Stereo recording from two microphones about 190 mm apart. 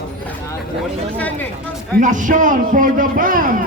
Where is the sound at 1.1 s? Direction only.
10° left (ahead or behind).